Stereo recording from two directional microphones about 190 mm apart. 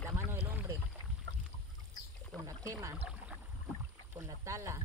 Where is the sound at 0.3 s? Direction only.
10° right (ahead or behind).